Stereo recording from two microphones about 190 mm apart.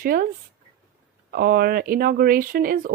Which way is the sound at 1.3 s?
55° right (ahead or behind).